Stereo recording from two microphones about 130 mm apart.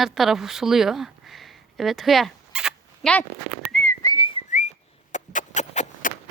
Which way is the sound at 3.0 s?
Centre (ahead or behind).